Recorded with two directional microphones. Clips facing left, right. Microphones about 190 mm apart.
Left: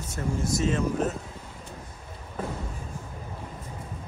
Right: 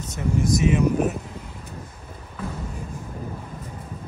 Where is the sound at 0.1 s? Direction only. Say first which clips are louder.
Right 6 dB; 15° right (ahead or behind).